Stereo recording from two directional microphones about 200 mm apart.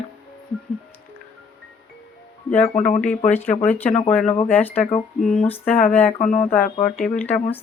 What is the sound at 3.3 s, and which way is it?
Speech, 10° left (ahead or behind).